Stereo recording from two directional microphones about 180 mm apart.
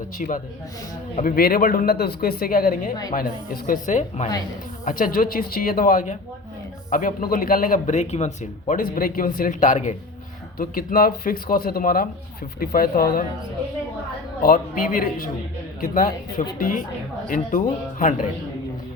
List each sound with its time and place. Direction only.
0.2 s a man's voice: 45° left (ahead or behind)
14.4 s a man's voice: 50° left (ahead or behind)